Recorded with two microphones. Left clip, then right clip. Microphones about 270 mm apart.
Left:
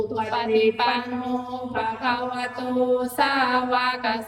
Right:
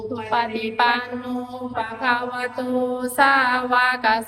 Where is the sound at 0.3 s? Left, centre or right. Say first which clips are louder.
Left 1 dB; centre.